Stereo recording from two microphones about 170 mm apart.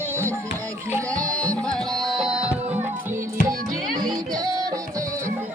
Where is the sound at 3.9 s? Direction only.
25° right (ahead or behind).